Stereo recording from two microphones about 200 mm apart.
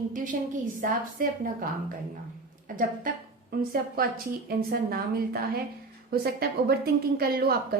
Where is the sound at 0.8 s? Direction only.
45° right (ahead or behind).